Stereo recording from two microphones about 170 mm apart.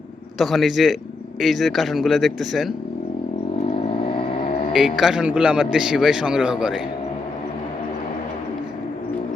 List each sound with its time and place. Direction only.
0.3 s a man's voice: centre (ahead or behind)
3.7 s vehicle: 35° left (ahead or behind)
4.9 s a man's voice: 5° right (ahead or behind)